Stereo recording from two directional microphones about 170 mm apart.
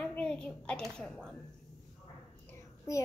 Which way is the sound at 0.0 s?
5° left (ahead or behind).